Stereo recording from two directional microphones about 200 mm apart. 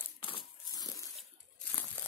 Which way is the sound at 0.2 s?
20° left (ahead or behind).